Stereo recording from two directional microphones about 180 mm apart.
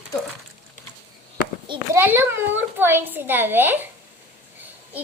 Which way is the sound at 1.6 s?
25° right (ahead or behind).